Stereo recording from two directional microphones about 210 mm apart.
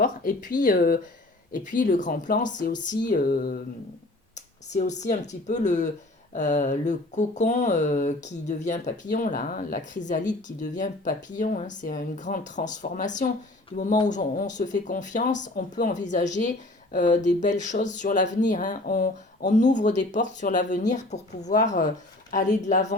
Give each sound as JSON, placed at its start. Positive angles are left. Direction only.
{"t": 0.0, "sound": "speech", "side_deg": 40}
{"t": 3.1, "sound": "a sound", "side_deg": 40}
{"t": 4.7, "sound": "speech", "side_deg": 35}